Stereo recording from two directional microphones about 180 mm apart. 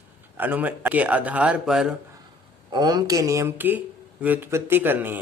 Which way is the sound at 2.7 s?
25° right (ahead or behind).